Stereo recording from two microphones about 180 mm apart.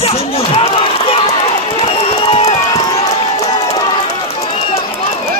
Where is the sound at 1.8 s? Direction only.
35° left (ahead or behind).